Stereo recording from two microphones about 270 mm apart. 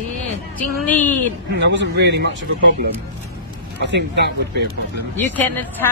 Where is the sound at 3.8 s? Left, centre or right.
Right.